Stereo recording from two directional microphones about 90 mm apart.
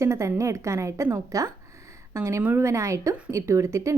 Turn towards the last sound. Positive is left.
turn(degrees=-35)  # may be behind; listen again after turning